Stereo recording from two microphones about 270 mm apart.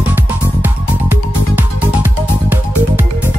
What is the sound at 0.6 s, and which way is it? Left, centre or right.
Music, centre.